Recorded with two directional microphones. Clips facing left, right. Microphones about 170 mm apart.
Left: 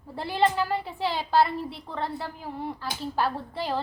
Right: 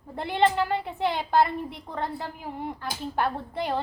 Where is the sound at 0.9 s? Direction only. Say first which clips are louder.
Right 1 dB; 20° right (ahead or behind).